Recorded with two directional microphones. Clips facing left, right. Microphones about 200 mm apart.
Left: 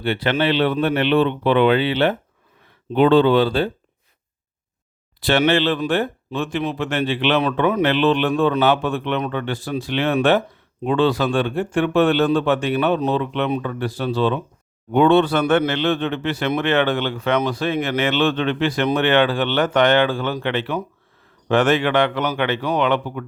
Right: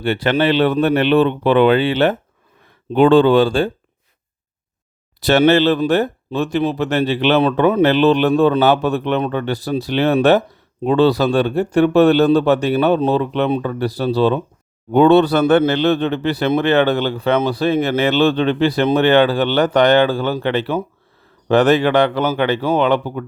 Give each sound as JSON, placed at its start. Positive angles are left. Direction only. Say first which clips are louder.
{"t": 0.0, "sound": "speech", "louder": "right 4 dB", "side_deg": -45}
{"t": 5.2, "sound": "speech", "louder": "right 5 dB", "side_deg": -40}